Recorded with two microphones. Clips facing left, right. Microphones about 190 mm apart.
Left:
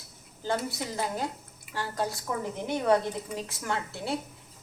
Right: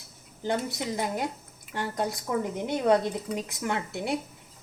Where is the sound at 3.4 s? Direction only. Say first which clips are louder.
Right 2 dB; 20° right (ahead or behind).